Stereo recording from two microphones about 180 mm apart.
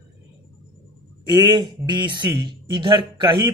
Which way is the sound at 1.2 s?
25° right (ahead or behind).